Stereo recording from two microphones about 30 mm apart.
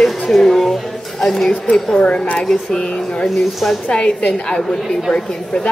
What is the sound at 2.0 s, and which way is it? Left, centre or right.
Speech, left.